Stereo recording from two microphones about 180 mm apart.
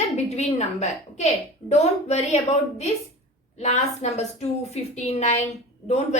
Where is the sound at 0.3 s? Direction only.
40° left (ahead or behind).